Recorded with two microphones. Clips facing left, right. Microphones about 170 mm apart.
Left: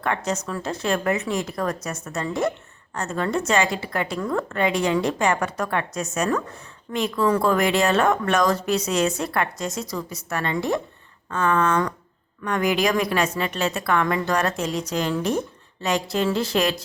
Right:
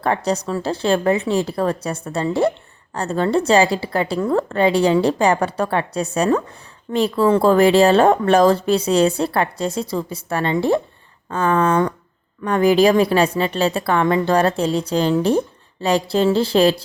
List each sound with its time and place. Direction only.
0.0 s a woman's voice: 35° right (ahead or behind)